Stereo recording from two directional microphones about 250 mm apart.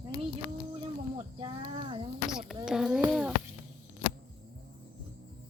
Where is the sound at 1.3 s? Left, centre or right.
Right.